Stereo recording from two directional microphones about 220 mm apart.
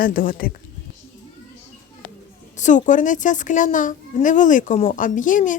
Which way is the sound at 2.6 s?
35° left (ahead or behind).